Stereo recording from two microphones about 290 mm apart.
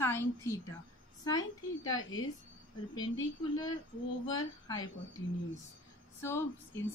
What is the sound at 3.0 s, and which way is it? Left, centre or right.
Speech, left.